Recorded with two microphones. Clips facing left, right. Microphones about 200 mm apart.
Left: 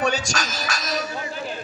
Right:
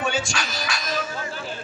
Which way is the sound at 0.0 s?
40° left (ahead or behind).